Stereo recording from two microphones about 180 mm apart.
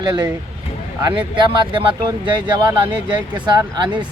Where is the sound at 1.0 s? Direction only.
25° right (ahead or behind).